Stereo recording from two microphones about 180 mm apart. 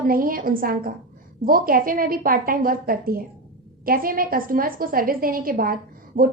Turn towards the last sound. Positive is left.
turn(degrees=-55)  # may be behind; listen again after turning